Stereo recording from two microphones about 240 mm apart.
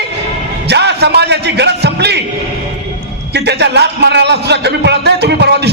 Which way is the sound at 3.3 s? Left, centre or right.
Right.